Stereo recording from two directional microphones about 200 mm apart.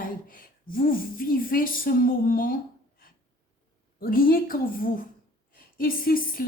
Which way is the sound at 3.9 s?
45° left (ahead or behind).